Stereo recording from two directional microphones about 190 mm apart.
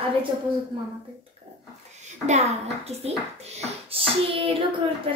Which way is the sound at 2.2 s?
35° right (ahead or behind).